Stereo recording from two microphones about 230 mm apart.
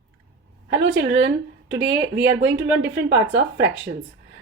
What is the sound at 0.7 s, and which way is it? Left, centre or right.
Speech, right.